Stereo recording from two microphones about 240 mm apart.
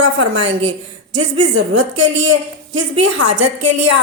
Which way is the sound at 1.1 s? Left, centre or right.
Right.